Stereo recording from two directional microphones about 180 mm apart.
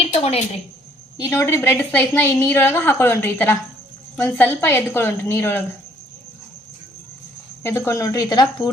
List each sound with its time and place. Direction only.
0.0 s a sound: 35° left (ahead or behind)
1.1 s a woman's voice: 15° left (ahead or behind)
7.6 s speech: 15° left (ahead or behind)